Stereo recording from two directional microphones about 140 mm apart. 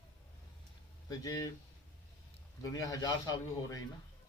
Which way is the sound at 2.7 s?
25° left (ahead or behind).